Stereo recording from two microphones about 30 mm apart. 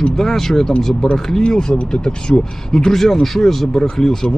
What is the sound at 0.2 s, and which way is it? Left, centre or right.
Speech, centre.